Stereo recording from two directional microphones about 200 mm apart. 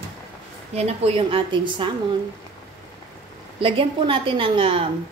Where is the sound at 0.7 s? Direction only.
30° right (ahead or behind).